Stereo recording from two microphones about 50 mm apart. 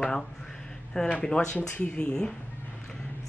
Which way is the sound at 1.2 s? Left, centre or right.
Centre.